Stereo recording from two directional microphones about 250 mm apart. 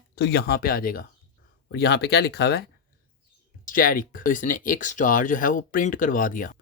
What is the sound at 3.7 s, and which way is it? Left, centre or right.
Speech, left.